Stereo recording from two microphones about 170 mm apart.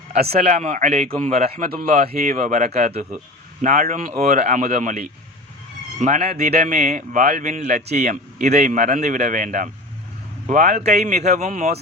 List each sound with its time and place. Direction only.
0.3 s a man's voice: 45° right (ahead or behind)
3.6 s a man's voice: 50° right (ahead or behind)
6.0 s a man's voice: 45° right (ahead or behind)
6.7 s a man's voice: 45° right (ahead or behind)